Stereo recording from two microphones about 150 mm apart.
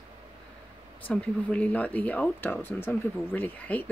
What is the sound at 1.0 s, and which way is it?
Speech, 10° left (ahead or behind).